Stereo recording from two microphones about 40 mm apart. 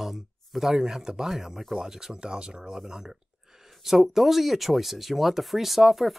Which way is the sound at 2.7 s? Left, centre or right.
Centre.